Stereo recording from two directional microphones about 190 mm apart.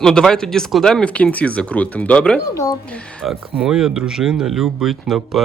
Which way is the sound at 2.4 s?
15° left (ahead or behind).